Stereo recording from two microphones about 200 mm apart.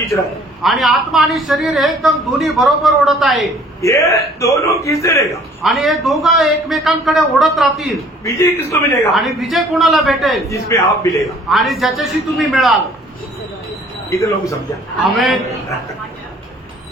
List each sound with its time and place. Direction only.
0.1 s a woman's voice: centre (ahead or behind)
3.8 s a man's voice: 15° left (ahead or behind)
5.6 s a woman's voice: centre (ahead or behind)
8.2 s a man's voice: 15° left (ahead or behind)
9.1 s a woman's voice: centre (ahead or behind)
10.5 s a man's voice: 15° left (ahead or behind)
11.4 s a woman's voice: centre (ahead or behind)
14.1 s a man's voice: 15° left (ahead or behind)
15.0 s a woman's voice: centre (ahead or behind)